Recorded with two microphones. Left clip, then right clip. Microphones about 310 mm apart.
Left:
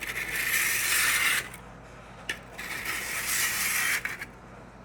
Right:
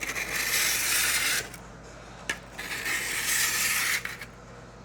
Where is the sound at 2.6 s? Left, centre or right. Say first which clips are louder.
Right 1 dB; centre.